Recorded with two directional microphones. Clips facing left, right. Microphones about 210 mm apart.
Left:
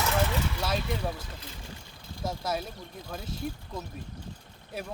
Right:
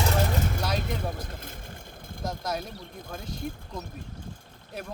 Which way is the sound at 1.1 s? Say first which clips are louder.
Right 3 dB; 50° right (ahead or behind).